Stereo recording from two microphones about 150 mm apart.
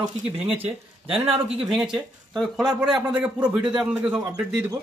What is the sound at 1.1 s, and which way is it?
Speech, 40° right (ahead or behind).